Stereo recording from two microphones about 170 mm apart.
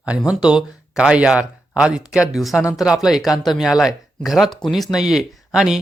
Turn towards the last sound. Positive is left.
turn(degrees=-5)  # may be behind; listen again after turning